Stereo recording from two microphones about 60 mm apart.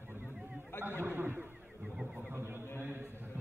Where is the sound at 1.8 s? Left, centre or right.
Centre.